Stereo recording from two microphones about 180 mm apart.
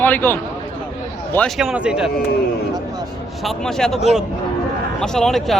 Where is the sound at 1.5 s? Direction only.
5° right (ahead or behind).